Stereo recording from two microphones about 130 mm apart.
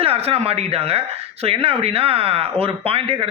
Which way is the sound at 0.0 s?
50° right (ahead or behind).